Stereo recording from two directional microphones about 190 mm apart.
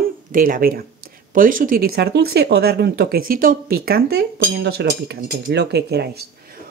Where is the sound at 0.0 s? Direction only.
45° right (ahead or behind).